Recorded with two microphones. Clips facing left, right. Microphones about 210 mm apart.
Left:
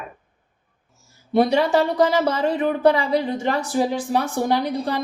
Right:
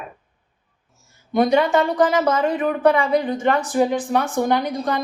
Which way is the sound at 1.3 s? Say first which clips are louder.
Right 1 dB; 30° left (ahead or behind).